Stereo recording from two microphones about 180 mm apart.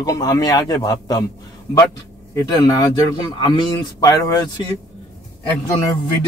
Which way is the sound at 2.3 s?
20° left (ahead or behind).